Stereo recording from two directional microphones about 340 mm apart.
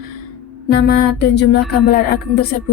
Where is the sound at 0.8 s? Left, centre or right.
Left.